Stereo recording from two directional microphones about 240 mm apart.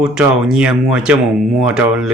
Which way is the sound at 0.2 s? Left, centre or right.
Centre.